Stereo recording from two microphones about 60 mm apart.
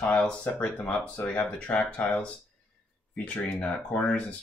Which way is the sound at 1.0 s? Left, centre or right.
Centre.